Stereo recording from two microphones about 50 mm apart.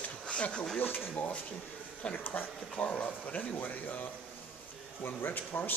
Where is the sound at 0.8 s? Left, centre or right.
Left.